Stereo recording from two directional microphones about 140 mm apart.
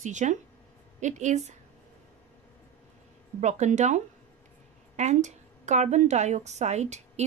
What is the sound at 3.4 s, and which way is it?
Speech, 60° right (ahead or behind).